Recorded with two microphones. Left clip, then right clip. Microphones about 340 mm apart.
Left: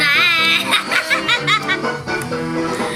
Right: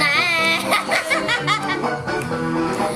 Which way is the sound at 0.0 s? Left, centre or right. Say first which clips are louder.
Left 4 dB; centre.